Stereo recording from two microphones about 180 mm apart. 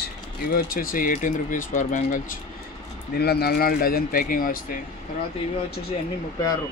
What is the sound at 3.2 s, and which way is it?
Speech, 60° left (ahead or behind).